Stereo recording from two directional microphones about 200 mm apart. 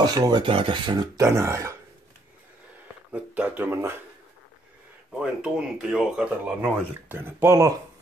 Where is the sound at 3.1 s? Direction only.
5° right (ahead or behind).